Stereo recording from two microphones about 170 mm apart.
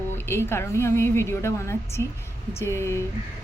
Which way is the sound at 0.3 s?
15° left (ahead or behind).